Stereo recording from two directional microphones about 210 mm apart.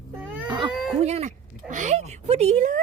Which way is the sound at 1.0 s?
30° right (ahead or behind).